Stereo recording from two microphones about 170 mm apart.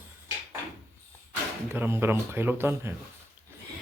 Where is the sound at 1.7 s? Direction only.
15° right (ahead or behind).